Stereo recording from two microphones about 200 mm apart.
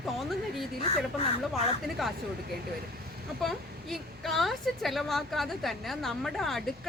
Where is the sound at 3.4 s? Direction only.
Centre (ahead or behind).